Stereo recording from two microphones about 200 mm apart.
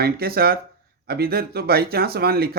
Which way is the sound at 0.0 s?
50° right (ahead or behind).